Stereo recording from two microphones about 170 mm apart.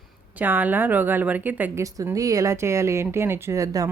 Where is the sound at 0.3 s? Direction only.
10° right (ahead or behind).